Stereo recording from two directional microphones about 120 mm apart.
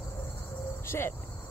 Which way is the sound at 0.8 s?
20° left (ahead or behind).